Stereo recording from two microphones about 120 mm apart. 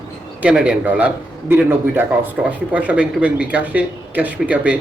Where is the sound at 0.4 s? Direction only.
5° right (ahead or behind).